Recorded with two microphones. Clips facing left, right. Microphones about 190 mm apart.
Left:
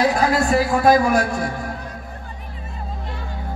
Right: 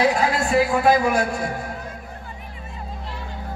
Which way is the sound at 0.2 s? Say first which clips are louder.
Left 2 dB; 40° left (ahead or behind).